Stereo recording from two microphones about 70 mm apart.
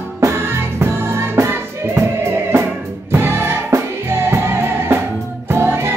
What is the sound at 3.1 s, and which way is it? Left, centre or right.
Music, right.